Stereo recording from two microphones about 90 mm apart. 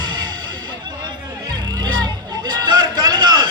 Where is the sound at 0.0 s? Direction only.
55° right (ahead or behind).